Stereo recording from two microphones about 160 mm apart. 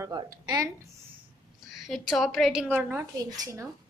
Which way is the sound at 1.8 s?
Centre (ahead or behind).